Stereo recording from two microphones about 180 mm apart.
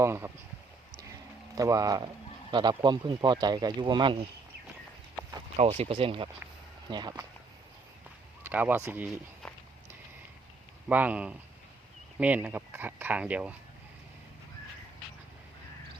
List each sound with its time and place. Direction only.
0.0 s speech: 15° right (ahead or behind)
1.5 s speech: 20° right (ahead or behind)
5.5 s speech: 35° right (ahead or behind)
8.4 s speech: 10° right (ahead or behind)
10.8 s speech: 10° right (ahead or behind)